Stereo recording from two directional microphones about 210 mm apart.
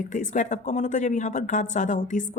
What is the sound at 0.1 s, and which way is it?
Speech, 35° left (ahead or behind).